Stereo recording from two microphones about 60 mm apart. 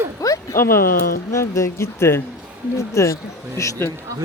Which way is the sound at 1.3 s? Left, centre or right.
Left.